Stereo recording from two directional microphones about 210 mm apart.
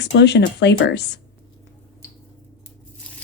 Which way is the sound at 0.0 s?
55° left (ahead or behind).